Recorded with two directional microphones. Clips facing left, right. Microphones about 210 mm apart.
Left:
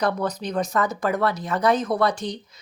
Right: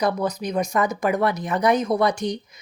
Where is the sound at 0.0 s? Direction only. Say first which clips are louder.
Right 1 dB; 10° right (ahead or behind).